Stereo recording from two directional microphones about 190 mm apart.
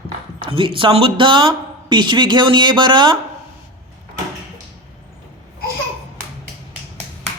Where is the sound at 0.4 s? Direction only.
25° right (ahead or behind).